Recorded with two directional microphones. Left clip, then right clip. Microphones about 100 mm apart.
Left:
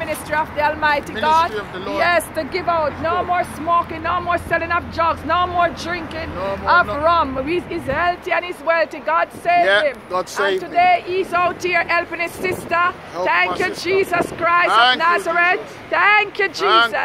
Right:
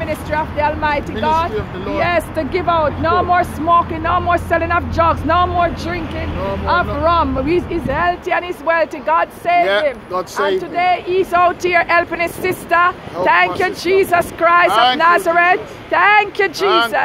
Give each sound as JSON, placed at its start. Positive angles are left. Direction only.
{"t": 0.0, "sound": "speech", "side_deg": 0}
{"t": 1.1, "sound": "speech", "side_deg": -15}
{"t": 2.0, "sound": "speech", "side_deg": 0}
{"t": 2.3, "sound": "speech", "side_deg": -15}
{"t": 3.1, "sound": "speech", "side_deg": -40}
{"t": 3.9, "sound": "speech", "side_deg": -25}
{"t": 5.6, "sound": "speech", "side_deg": -10}
{"t": 10.1, "sound": "speech", "side_deg": 0}
{"t": 10.7, "sound": "speech", "side_deg": -35}
{"t": 14.7, "sound": "speech", "side_deg": -15}
{"t": 15.0, "sound": "speech", "side_deg": -55}
{"t": 16.6, "sound": "speech", "side_deg": -15}